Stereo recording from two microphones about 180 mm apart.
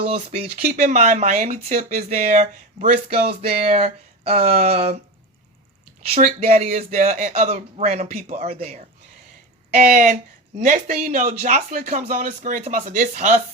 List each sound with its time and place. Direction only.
0.1 s speech: 40° right (ahead or behind)
2.0 s speech: 55° right (ahead or behind)
2.3 s speech: 40° right (ahead or behind)
6.1 s speech: 40° right (ahead or behind)